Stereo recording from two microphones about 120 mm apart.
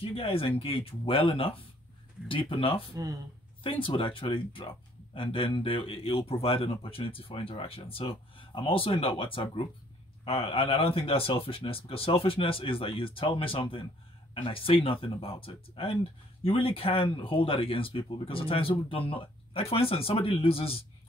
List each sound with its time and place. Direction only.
0.0 s speech: 55° left (ahead or behind)
2.9 s speech: 30° right (ahead or behind)
3.8 s speech: 50° left (ahead or behind)